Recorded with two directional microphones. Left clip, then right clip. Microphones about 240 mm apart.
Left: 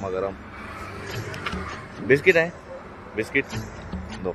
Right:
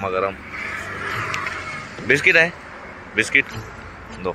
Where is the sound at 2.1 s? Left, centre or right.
Centre.